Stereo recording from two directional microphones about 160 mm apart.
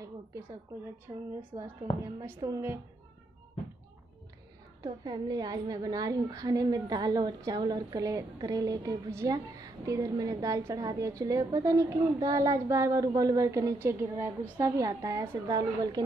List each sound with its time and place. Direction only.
0.0 s a woman's voice: 20° right (ahead or behind)
4.8 s a woman's voice: 25° right (ahead or behind)